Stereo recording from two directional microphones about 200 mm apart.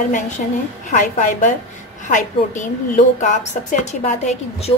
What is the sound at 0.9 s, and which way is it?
A woman's voice, 40° left (ahead or behind).